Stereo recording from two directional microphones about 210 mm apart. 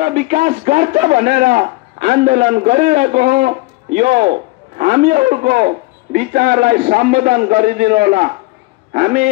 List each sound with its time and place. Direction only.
0.0 s a man's voice: 35° right (ahead or behind)